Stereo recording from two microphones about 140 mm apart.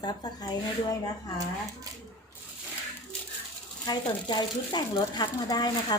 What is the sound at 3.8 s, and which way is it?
Speech, 30° left (ahead or behind).